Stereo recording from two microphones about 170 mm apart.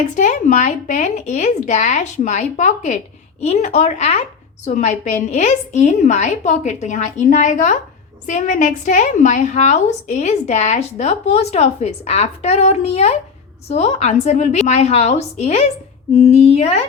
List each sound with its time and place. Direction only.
0.2 s a woman's voice: 45° left (ahead or behind)